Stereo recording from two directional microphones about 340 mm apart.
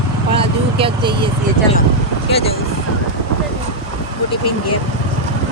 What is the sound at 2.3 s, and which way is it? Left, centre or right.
Speech, centre.